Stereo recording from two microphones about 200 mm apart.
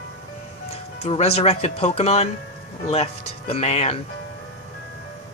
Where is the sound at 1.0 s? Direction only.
30° left (ahead or behind).